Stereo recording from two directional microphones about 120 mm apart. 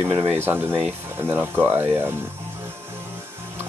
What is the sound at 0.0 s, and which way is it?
Speech, 25° right (ahead or behind).